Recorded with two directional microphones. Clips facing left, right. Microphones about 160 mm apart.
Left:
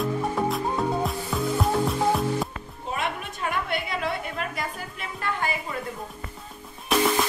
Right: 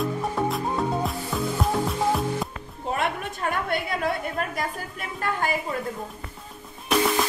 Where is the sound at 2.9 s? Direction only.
50° right (ahead or behind).